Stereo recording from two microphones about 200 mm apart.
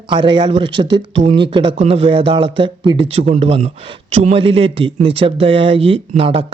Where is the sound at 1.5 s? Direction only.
25° right (ahead or behind).